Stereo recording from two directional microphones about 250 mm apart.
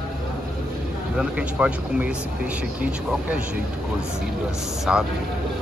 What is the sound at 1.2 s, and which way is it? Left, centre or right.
Speech, centre.